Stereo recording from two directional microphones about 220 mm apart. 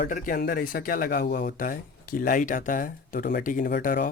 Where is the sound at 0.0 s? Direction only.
35° left (ahead or behind).